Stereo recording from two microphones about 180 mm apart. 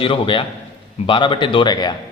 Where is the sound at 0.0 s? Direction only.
30° left (ahead or behind).